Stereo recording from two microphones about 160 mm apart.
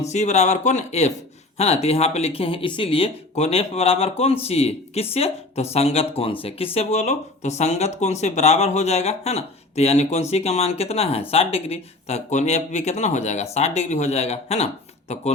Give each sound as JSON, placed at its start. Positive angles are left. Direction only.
{"t": 0.0, "sound": "speech", "side_deg": 45}